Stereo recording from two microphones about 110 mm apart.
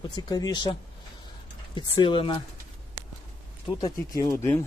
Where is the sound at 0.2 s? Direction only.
35° left (ahead or behind).